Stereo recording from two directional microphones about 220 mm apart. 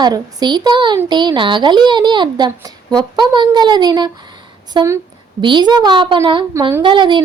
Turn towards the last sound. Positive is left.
turn(degrees=-20)  # may be behind; listen again after turning